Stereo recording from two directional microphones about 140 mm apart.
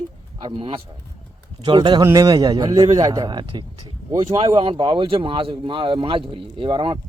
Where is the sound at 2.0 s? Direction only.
25° right (ahead or behind).